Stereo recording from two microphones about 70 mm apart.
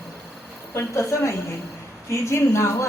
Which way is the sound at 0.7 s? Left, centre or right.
Left.